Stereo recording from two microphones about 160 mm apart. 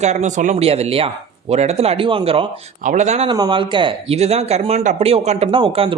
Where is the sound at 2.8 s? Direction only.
50° right (ahead or behind).